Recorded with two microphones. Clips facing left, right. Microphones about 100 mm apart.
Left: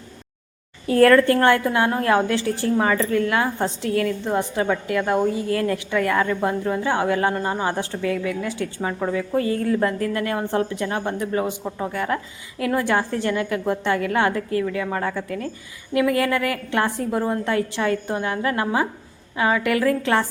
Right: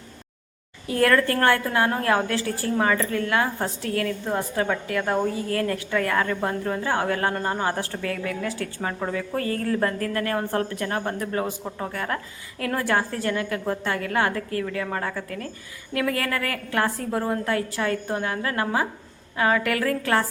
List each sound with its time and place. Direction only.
0.9 s a woman's voice: 35° left (ahead or behind)